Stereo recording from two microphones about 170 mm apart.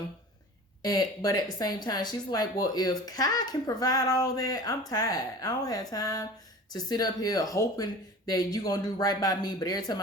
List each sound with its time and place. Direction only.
0.8 s speech: 20° left (ahead or behind)